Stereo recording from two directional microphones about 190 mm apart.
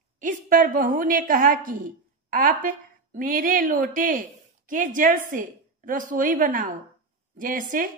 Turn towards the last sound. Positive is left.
turn(degrees=-45)  # may be behind; listen again after turning